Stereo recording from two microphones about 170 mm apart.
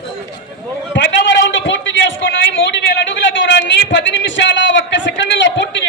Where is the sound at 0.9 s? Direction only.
90° left.